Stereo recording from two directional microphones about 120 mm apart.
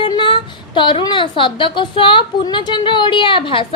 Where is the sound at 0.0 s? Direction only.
40° left (ahead or behind).